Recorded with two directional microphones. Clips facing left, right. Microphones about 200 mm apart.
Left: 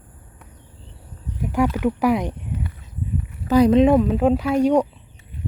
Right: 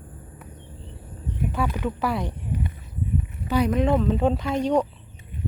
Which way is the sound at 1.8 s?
15° left (ahead or behind).